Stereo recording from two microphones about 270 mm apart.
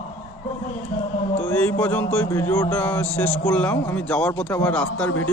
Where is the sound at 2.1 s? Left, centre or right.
Centre.